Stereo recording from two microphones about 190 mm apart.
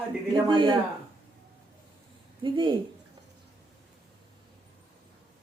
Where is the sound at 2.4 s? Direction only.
25° right (ahead or behind).